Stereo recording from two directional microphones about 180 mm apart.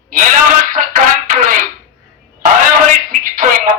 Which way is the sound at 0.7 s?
50° right (ahead or behind).